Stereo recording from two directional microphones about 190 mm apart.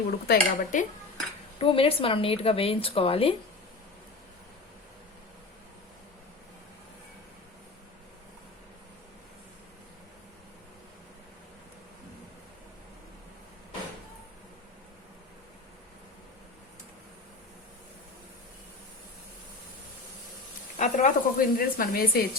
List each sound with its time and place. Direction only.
0.3 s dishes: 45° left (ahead or behind)
1.5 s a woman's voice: 30° left (ahead or behind)
20.7 s a sound: 40° left (ahead or behind)